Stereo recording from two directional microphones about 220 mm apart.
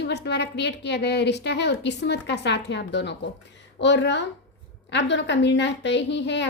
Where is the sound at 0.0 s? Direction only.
50° left (ahead or behind).